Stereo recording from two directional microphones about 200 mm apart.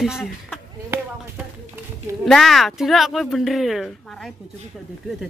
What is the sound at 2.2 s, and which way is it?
Speech, centre (ahead or behind).